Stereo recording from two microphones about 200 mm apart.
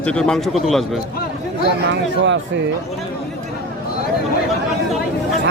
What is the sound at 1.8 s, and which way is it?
Speech, 60° right (ahead or behind).